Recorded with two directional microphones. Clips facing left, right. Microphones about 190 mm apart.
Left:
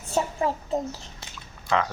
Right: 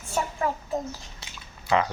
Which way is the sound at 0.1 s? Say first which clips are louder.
Left 2 dB; 25° left (ahead or behind).